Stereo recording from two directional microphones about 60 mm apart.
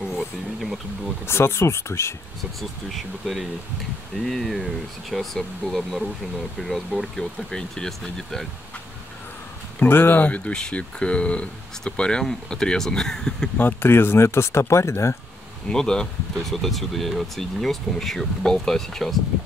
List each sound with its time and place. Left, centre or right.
0.1 s a sound: centre
1.2 s speech: left
2.9 s speech: centre
9.8 s speech: left; by 13.5 s centre
13.6 s speech: left
15.7 s speech: centre